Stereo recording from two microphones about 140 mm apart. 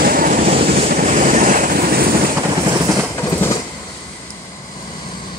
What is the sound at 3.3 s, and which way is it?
Train, 20° left (ahead or behind).